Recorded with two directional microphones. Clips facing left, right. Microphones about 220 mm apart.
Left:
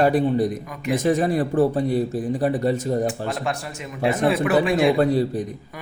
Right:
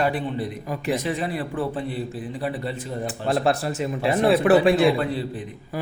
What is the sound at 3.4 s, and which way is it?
A man's voice, 35° right (ahead or behind).